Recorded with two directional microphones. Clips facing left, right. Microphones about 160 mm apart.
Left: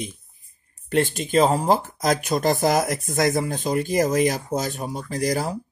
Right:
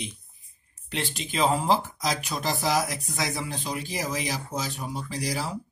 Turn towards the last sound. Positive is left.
turn(degrees=50)  # may be behind; listen again after turning